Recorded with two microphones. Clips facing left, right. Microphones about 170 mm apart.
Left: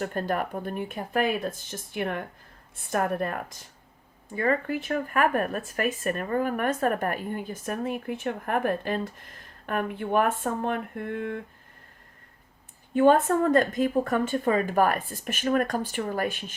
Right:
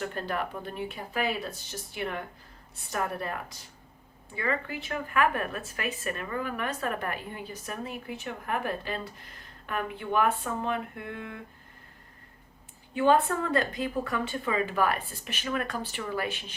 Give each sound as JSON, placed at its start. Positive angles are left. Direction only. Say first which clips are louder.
{"t": 0.0, "sound": "speech", "louder": "left 4 dB", "side_deg": 45}
{"t": 12.9, "sound": "speech", "louder": "left 4 dB", "side_deg": 50}